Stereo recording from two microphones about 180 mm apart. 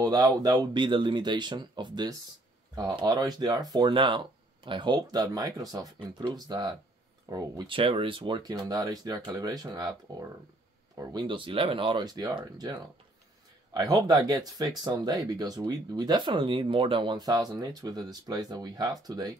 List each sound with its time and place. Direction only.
0.0 s speech: 20° right (ahead or behind)